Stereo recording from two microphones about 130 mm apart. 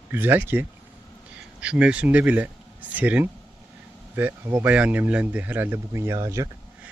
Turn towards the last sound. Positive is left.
turn(degrees=-25)  # may be behind; listen again after turning